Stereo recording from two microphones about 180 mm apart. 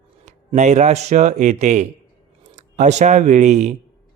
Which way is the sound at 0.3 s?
40° right (ahead or behind).